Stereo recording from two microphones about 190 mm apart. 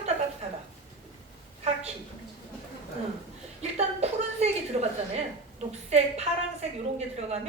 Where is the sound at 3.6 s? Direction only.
35° right (ahead or behind).